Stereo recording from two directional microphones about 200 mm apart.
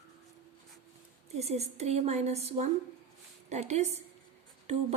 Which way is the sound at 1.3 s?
30° right (ahead or behind).